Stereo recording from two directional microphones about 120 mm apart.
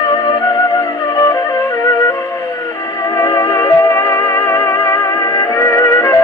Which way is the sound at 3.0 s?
30° left (ahead or behind).